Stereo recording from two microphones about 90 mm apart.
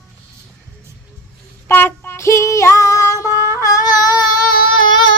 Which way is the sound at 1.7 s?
20° left (ahead or behind).